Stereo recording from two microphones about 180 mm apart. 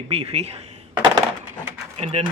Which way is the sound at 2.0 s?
40° right (ahead or behind).